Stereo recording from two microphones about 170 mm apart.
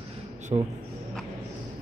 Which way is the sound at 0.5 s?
30° right (ahead or behind).